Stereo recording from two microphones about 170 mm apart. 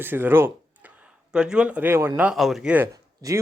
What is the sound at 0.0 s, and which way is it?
Speech, 10° right (ahead or behind).